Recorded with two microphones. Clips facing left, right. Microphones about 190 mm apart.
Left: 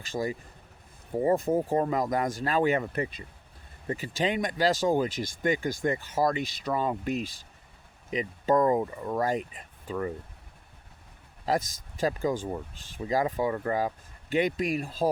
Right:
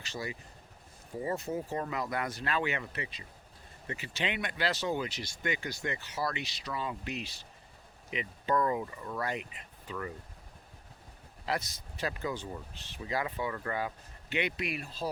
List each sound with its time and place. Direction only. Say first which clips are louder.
0.1 s speech: left 9 dB; 45° left (ahead or behind)
11.4 s speech: left 7 dB; 40° left (ahead or behind)